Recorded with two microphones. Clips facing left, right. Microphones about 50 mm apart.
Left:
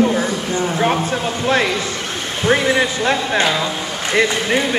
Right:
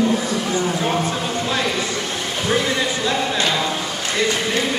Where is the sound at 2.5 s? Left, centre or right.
Left.